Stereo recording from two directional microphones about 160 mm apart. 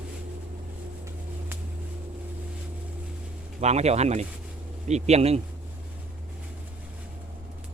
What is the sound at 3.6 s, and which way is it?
Speech, 45° right (ahead or behind).